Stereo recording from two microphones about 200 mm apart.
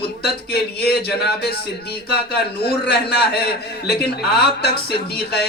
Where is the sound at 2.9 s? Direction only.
50° left (ahead or behind).